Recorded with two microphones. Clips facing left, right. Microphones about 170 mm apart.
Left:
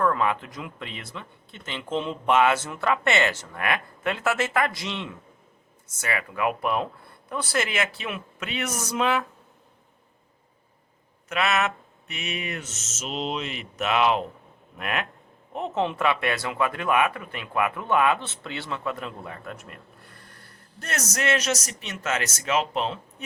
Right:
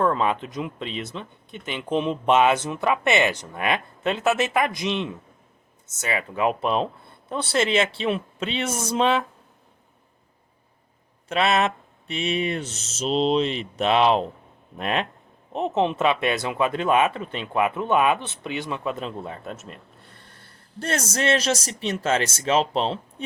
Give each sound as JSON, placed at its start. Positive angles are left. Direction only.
{"t": 0.0, "sound": "speech", "side_deg": -25}
{"t": 11.3, "sound": "speech", "side_deg": -30}